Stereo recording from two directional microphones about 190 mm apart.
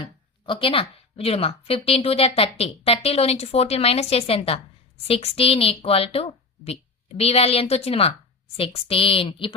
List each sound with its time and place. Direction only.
0.0 s a woman's voice: 25° left (ahead or behind)